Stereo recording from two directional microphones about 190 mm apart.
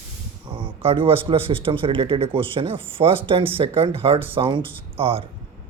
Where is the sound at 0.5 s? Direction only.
30° right (ahead or behind).